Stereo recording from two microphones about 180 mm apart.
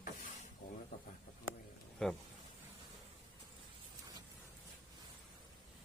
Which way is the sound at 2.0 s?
5° left (ahead or behind).